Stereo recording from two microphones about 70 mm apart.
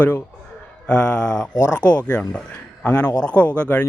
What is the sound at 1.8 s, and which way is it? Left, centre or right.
Speech, left.